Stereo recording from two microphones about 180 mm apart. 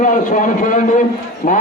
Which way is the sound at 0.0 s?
45° left (ahead or behind).